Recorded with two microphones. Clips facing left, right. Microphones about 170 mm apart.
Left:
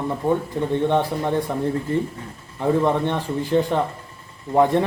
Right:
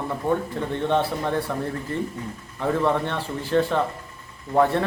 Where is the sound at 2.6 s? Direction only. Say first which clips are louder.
Left 3 dB; 15° left (ahead or behind).